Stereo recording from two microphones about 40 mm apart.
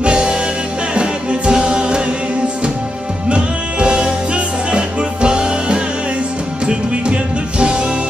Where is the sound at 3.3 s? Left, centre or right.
Right.